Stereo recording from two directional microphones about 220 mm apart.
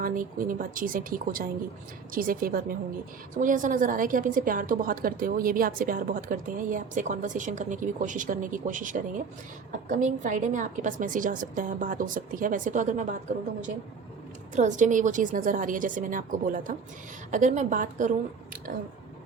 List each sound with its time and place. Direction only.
0.0 s a woman's voice: 40° right (ahead or behind)
14.5 s a woman's voice: 35° right (ahead or behind)